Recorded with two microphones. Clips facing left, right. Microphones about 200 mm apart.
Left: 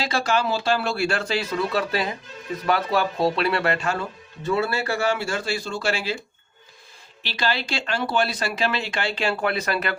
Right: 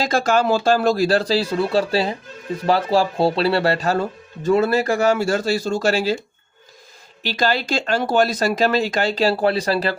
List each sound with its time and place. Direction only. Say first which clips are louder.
0.0 s speech: right 5 dB; 45° right (ahead or behind)
7.2 s speech: right 6 dB; 45° right (ahead or behind)